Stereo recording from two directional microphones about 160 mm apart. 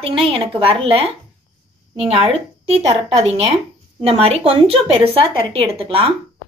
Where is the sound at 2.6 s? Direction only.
40° right (ahead or behind).